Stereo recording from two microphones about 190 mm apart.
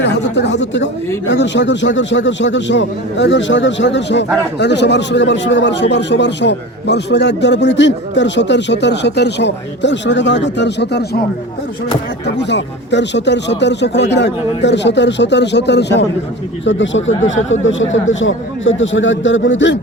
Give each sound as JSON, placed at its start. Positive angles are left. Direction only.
{"t": 0.0, "sound": "a man's voice", "side_deg": 65}
{"t": 12.4, "sound": "a man's voice", "side_deg": 70}
{"t": 16.6, "sound": "a man's voice", "side_deg": 75}